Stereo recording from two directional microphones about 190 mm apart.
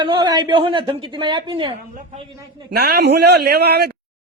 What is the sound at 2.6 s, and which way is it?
A man's voice, 60° right (ahead or behind).